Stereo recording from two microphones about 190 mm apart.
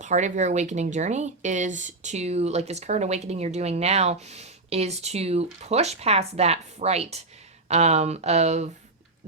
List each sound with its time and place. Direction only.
0.0 s speech: 40° right (ahead or behind)